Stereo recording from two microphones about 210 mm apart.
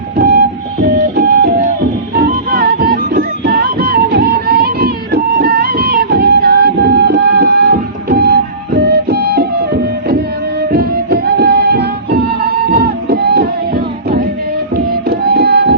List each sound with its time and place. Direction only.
0.2 s printer: 50° right (ahead or behind)
2.1 s music: 50° right (ahead or behind)